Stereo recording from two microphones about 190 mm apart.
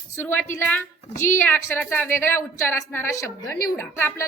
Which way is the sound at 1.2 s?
10° left (ahead or behind).